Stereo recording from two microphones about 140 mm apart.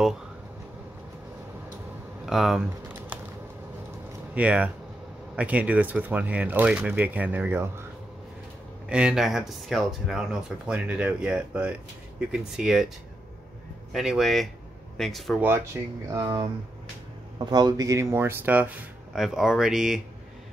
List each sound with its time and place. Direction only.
2.2 s speech: centre (ahead or behind)
4.4 s speech: 10° right (ahead or behind)
8.8 s speech: 5° right (ahead or behind)
13.9 s speech: centre (ahead or behind)
15.4 s speech: 20° right (ahead or behind)
17.5 s speech: 30° right (ahead or behind); by 20.0 s 5° right (ahead or behind)